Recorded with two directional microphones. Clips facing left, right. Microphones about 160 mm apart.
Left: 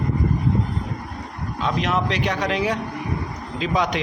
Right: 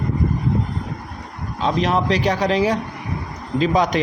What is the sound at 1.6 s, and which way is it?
A man's voice, 35° right (ahead or behind).